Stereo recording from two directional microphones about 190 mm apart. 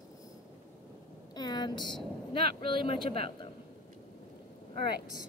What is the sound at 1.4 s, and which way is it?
Speech, 20° left (ahead or behind).